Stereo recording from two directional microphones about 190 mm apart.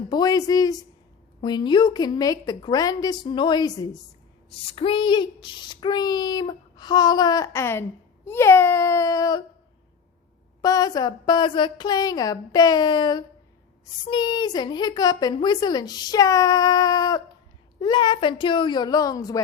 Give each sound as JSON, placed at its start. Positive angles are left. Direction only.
{"t": 0.1, "sound": "a child's voice", "side_deg": 20}
{"t": 10.6, "sound": "a child's voice", "side_deg": 20}